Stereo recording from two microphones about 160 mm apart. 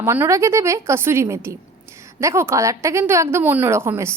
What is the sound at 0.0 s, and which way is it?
Speech, 15° right (ahead or behind).